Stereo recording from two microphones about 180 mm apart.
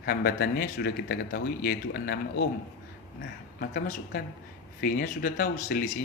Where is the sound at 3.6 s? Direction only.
55° left (ahead or behind).